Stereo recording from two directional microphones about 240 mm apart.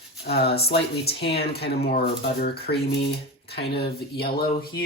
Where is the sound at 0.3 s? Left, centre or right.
Left.